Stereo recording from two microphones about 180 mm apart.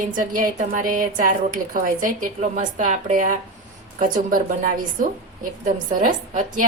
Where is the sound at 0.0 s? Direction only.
50° right (ahead or behind).